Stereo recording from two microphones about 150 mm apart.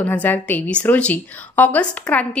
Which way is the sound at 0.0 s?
10° left (ahead or behind).